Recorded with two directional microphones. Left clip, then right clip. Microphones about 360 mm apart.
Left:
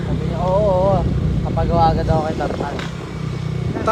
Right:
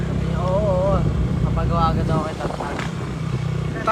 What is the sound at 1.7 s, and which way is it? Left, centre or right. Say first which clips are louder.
Vehicle: left 6 dB; left.